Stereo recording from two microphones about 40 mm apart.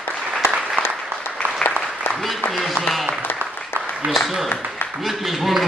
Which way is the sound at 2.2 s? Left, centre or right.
Centre.